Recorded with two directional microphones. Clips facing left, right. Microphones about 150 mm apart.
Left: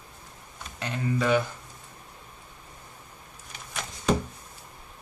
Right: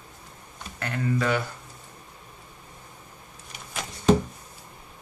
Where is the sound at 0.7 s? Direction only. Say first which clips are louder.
Right 2 dB; 15° left (ahead or behind).